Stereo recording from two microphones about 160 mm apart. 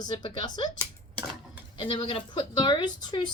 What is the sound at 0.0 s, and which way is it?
A woman's voice, 25° left (ahead or behind).